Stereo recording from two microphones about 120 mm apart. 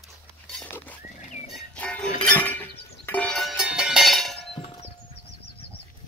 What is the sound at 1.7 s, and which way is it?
Music, 10° left (ahead or behind).